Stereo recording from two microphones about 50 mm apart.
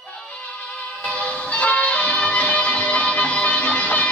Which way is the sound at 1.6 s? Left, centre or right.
Left.